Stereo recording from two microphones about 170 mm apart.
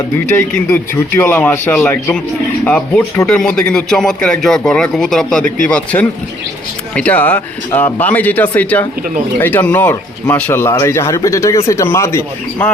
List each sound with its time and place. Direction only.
0.3 s speech: 15° left (ahead or behind)